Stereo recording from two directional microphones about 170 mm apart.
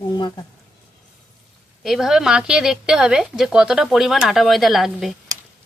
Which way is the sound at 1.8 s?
Centre (ahead or behind).